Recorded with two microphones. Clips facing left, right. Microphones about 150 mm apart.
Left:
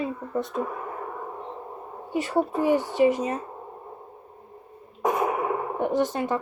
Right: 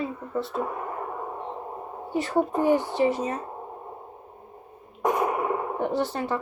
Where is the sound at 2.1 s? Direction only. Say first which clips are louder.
Even; 10° left (ahead or behind).